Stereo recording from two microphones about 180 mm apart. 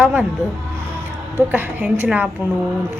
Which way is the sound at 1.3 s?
10° right (ahead or behind).